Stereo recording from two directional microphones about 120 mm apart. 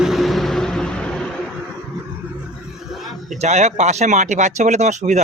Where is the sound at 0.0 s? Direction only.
Centre (ahead or behind).